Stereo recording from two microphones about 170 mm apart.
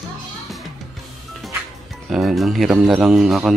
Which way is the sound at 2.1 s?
Centre (ahead or behind).